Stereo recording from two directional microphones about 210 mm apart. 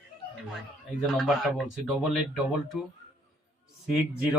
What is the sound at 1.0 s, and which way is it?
Speech, centre (ahead or behind).